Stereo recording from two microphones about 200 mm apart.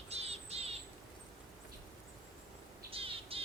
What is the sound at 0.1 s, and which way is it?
Cricket, 30° right (ahead or behind).